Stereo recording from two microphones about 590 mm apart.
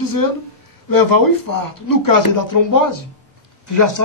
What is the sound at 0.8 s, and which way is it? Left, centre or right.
A man's voice, left.